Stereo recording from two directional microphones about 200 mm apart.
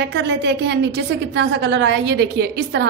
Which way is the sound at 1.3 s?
60° right (ahead or behind).